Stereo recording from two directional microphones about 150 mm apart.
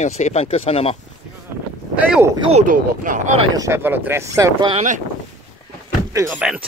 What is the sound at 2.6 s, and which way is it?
Speech, 60° right (ahead or behind).